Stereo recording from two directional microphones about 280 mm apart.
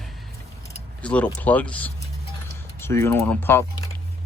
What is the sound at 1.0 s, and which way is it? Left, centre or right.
Speech, centre.